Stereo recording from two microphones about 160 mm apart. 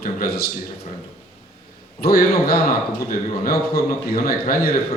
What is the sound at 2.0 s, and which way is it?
A man's voice, 70° left (ahead or behind).